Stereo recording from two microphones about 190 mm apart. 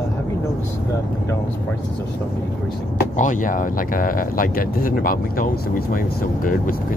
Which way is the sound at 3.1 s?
45° left (ahead or behind).